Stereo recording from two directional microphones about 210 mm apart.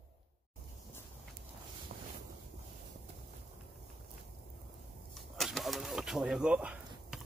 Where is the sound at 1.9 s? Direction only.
40° right (ahead or behind).